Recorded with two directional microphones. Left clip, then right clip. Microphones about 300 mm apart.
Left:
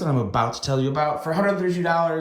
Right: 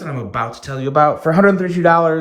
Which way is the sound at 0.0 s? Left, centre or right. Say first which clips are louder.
Even; centre.